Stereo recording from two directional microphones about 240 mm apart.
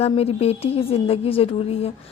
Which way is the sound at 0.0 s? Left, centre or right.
Left.